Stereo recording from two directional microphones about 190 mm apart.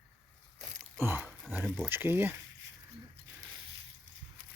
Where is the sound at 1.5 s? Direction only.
Centre (ahead or behind).